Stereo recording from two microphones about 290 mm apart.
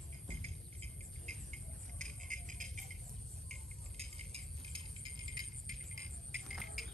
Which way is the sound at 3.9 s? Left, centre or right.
Right.